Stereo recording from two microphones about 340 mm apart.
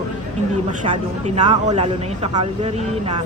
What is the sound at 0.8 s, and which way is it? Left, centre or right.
Speech, centre.